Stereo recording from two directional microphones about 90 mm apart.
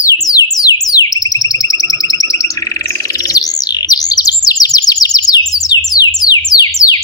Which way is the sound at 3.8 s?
45° left (ahead or behind).